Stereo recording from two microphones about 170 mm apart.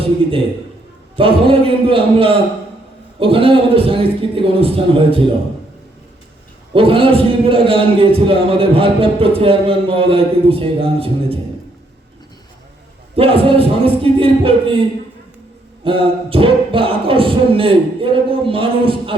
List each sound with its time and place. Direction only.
0.0 s a man's voice: 35° right (ahead or behind)
6.7 s a man's voice: 30° right (ahead or behind)
13.1 s a man's voice: 35° right (ahead or behind)